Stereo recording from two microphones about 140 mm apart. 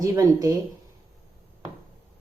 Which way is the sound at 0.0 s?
25° right (ahead or behind).